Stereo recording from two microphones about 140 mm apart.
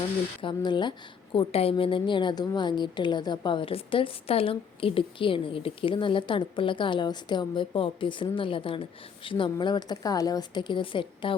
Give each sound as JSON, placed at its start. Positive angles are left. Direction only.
{"t": 0.4, "sound": "a woman's voice", "side_deg": 35}